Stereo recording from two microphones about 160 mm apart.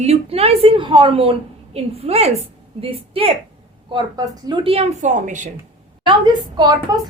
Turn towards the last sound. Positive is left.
turn(degrees=-25)  # may be behind; listen again after turning